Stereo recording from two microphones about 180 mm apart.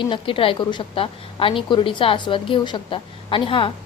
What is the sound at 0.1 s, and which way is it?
A woman's voice, 30° left (ahead or behind).